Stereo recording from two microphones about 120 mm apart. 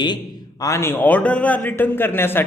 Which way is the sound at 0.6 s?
25° left (ahead or behind).